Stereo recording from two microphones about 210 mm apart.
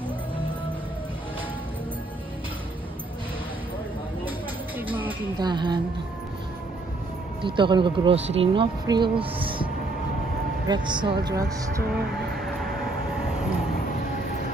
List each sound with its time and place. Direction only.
4.7 s music: 10° right (ahead or behind)
5.4 s speech: 20° right (ahead or behind)
7.4 s speech: 25° right (ahead or behind)
10.7 s speech: 20° right (ahead or behind)
12.4 s train: centre (ahead or behind)